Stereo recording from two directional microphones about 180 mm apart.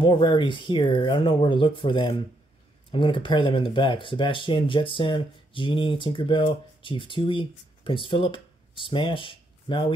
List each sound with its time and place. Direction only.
0.0 s speech: 25° left (ahead or behind)